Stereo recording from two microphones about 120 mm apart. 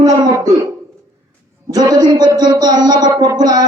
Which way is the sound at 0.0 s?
30° right (ahead or behind).